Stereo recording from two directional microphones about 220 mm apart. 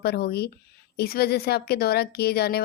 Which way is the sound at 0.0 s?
45° left (ahead or behind).